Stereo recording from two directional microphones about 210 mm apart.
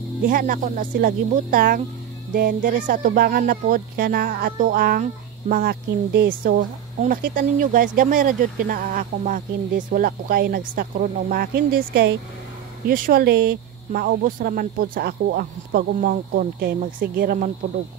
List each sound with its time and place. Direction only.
0.3 s speech: 40° right (ahead or behind)